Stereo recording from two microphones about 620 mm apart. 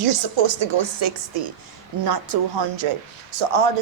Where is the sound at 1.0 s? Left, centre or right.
Right.